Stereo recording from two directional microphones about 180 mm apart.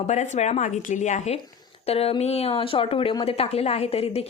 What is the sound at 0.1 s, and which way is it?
Speech, 40° left (ahead or behind).